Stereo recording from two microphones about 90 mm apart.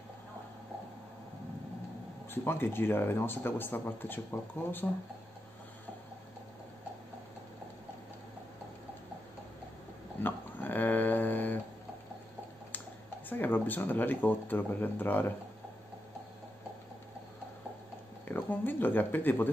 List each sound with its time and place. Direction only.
2.3 s speech: 25° left (ahead or behind)
10.2 s a sound: 20° left (ahead or behind)
13.3 s speech: 20° left (ahead or behind)
18.3 s speech: 20° left (ahead or behind)